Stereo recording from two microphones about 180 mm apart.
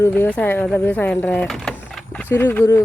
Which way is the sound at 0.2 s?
10° left (ahead or behind).